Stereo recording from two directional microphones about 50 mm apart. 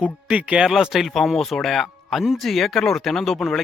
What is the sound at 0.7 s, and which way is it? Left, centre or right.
Speech, centre.